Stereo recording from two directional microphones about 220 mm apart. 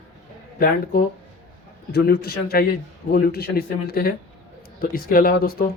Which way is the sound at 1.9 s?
45° left (ahead or behind).